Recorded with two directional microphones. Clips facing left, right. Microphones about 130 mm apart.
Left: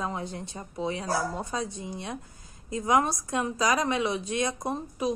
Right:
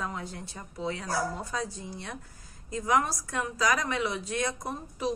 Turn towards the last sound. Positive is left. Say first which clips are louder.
# left 4 dB
turn(degrees=20)  # may be behind; listen again after turning